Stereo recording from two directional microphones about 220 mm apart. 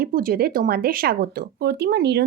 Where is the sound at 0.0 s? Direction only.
40° right (ahead or behind).